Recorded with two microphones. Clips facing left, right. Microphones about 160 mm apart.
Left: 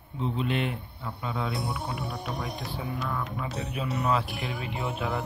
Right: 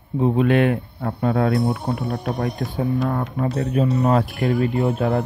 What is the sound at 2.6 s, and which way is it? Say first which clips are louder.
A man's voice: right 12 dB; 50° right (ahead or behind).